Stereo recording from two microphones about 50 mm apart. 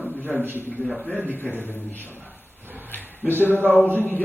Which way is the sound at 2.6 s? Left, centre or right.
Right.